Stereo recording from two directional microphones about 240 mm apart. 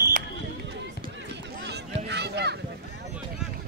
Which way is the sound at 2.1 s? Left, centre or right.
Right.